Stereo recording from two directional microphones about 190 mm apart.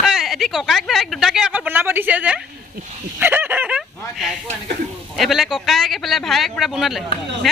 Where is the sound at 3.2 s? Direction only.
10° right (ahead or behind).